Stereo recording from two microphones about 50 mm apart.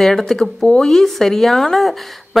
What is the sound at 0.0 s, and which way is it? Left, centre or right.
A woman's voice, centre.